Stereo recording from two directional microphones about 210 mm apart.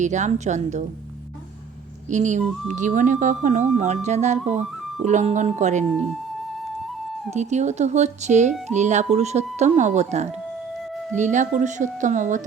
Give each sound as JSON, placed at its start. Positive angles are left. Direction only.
{"t": 0.0, "sound": "speech", "side_deg": -35}
{"t": 2.0, "sound": "speech", "side_deg": -35}
{"t": 7.3, "sound": "speech", "side_deg": -35}